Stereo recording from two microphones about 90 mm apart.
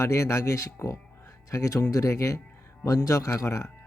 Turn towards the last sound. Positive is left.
turn(degrees=35)  # may be behind; listen again after turning